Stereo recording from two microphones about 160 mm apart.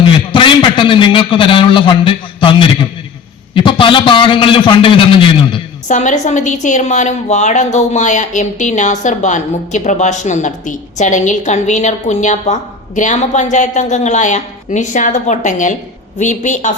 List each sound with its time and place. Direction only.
0.0 s a sound: 30° left (ahead or behind)
3.5 s a man's voice: 30° left (ahead or behind)
5.9 s a woman's voice: 50° left (ahead or behind)